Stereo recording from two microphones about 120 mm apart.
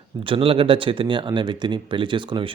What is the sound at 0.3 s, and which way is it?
Speech, 50° right (ahead or behind).